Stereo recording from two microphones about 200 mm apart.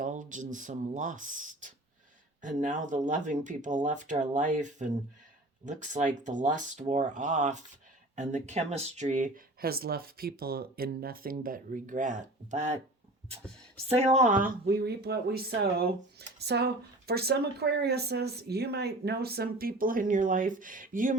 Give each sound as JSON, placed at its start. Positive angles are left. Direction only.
{"t": 0.0, "sound": "speech", "side_deg": -40}
{"t": 13.8, "sound": "speech", "side_deg": -30}